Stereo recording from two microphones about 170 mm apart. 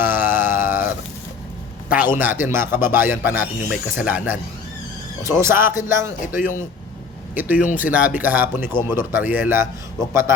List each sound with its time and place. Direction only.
0.0 s mantra: 10° right (ahead or behind)
2.1 s speech: 10° right (ahead or behind)
5.2 s speech: 15° right (ahead or behind)